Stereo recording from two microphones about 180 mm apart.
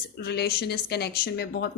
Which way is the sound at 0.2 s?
65° left (ahead or behind).